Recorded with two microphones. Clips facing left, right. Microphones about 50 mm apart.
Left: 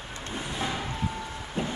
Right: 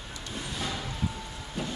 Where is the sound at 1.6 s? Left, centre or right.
Left.